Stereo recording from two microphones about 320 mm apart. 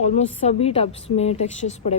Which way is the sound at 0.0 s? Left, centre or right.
Left.